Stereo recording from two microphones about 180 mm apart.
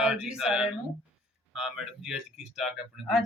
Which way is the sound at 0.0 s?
5° right (ahead or behind).